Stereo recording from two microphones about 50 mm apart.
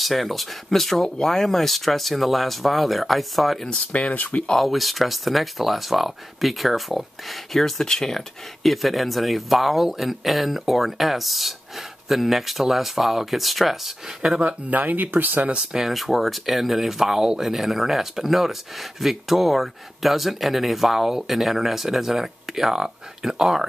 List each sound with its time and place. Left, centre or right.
0.0 s speech: centre
3.9 s speech: left
4.6 s speech: centre
14.4 s speech: right
15.7 s speech: centre